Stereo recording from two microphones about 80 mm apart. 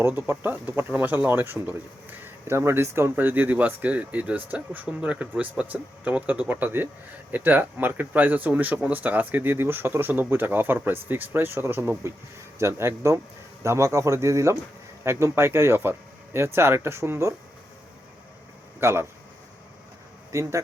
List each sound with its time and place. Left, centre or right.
0.0 s speech: right
18.8 s speech: right
20.3 s speech: right